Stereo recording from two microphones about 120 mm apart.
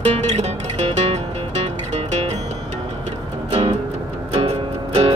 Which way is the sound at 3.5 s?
60° right (ahead or behind).